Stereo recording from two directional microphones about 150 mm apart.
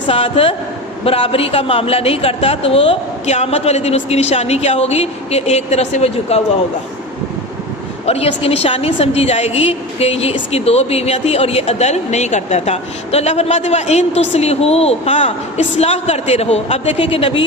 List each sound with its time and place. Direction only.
0.1 s a man's voice: 40° left (ahead or behind)
8.0 s a woman's voice: 40° left (ahead or behind)